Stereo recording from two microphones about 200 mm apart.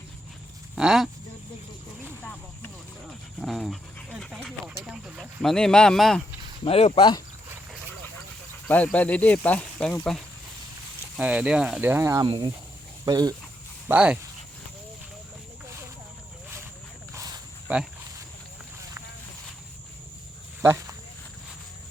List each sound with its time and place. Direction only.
0.8 s speech: centre (ahead or behind)
3.4 s speech: centre (ahead or behind)
6.7 s speech: 30° left (ahead or behind)
8.6 s speech: 5° left (ahead or behind); by 13.3 s 20° right (ahead or behind)
13.8 s speech: 5° right (ahead or behind)
17.7 s speech: 10° right (ahead or behind)
20.6 s speech: 15° right (ahead or behind)